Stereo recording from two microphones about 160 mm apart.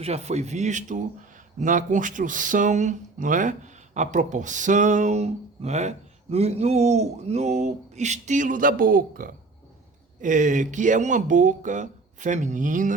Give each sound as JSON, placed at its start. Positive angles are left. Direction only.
{"t": 0.0, "sound": "speech", "side_deg": -40}